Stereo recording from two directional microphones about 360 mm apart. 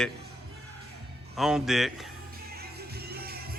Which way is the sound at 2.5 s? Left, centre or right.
Right.